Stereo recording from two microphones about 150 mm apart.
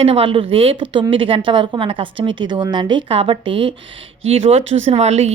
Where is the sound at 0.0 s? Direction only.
40° right (ahead or behind).